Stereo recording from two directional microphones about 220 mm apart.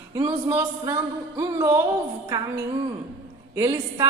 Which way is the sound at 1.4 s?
15° right (ahead or behind).